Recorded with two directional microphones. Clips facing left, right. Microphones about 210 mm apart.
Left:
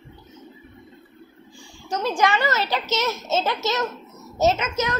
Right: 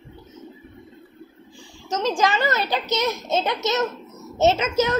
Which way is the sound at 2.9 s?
15° right (ahead or behind).